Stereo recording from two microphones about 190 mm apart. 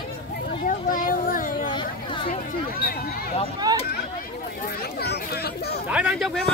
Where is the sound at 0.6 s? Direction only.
45° left (ahead or behind).